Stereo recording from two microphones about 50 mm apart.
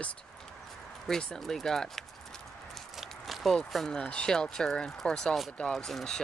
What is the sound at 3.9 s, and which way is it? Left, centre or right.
Speech, left.